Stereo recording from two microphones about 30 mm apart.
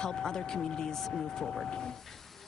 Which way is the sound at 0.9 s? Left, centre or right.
Centre.